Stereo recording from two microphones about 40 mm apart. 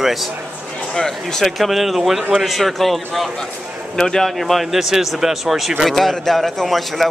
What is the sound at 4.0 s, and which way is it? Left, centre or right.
Speech, centre.